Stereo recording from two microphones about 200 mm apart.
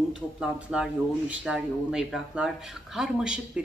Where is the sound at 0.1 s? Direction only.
5° right (ahead or behind).